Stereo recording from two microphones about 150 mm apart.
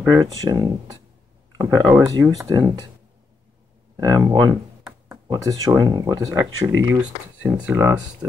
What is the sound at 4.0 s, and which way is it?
Speech, 25° right (ahead or behind).